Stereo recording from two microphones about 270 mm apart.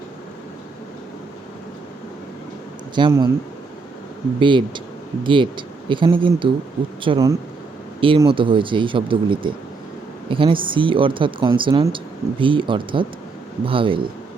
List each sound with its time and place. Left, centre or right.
2.9 s speech: centre
4.4 s speech: centre